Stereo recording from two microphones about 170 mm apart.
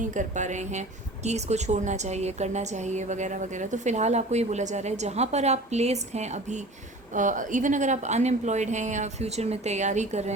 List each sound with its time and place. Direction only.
0.0 s speech: 45° right (ahead or behind)